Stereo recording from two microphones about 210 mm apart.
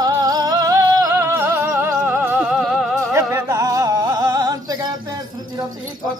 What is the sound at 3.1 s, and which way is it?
Music, 15° right (ahead or behind).